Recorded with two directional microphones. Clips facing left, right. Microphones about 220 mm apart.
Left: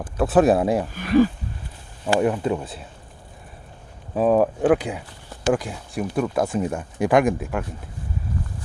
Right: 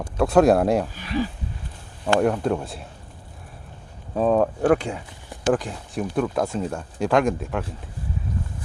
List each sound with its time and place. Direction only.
0.0 s speech: 5° left (ahead or behind)
0.9 s speech: 50° left (ahead or behind)
2.1 s speech: 5° left (ahead or behind)
4.1 s speech: 5° left (ahead or behind)